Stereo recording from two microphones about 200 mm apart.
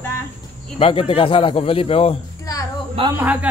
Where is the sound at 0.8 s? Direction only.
30° left (ahead or behind).